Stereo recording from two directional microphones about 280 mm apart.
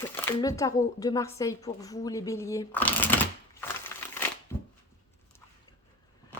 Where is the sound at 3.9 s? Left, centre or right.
Centre.